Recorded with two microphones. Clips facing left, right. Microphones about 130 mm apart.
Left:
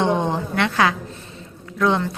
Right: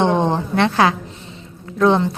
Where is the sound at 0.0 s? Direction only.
30° right (ahead or behind).